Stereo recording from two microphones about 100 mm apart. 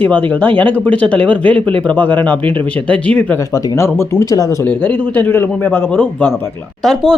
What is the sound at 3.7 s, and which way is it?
A man's voice, 25° left (ahead or behind).